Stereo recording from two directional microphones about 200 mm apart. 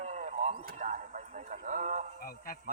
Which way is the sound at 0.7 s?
40° right (ahead or behind).